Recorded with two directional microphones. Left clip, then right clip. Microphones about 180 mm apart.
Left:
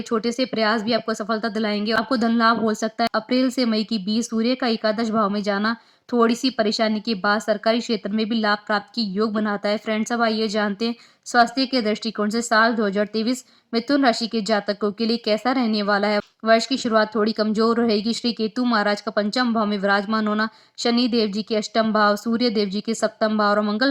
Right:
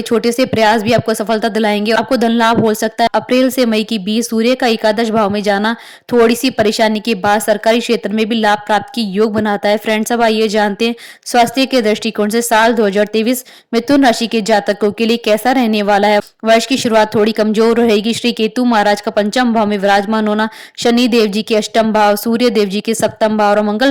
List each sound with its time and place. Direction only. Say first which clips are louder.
0.1 s a woman's voice: right 10 dB; 35° right (ahead or behind)